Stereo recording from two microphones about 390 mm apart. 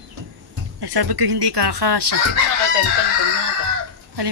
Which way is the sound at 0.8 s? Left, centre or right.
Right.